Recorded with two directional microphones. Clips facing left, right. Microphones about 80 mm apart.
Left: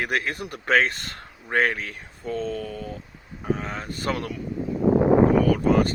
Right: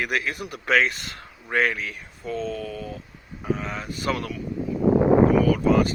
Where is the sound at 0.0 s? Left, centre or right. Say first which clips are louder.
Even; left.